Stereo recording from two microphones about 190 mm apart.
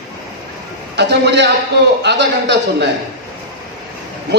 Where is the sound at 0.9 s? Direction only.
65° right (ahead or behind).